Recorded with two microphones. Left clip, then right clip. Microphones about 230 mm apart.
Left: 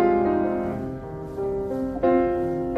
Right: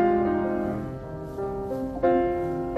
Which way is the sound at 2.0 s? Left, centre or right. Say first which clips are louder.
Left 2 dB; left.